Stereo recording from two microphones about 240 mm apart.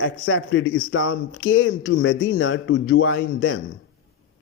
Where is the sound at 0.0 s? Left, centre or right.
Left.